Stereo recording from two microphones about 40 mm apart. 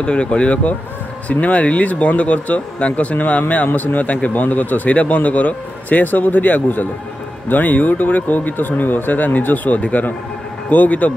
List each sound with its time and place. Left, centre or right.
0.0 s speech: left
9.8 s speech: left